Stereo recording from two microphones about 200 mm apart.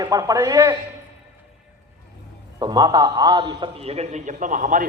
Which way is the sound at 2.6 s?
20° right (ahead or behind).